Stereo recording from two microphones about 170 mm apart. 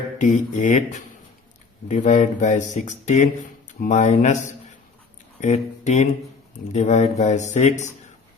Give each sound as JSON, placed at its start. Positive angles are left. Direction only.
{"t": 0.2, "sound": "speech", "side_deg": 45}